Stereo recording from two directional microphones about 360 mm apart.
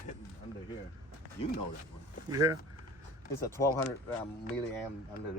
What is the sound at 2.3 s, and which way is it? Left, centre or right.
Speech, centre.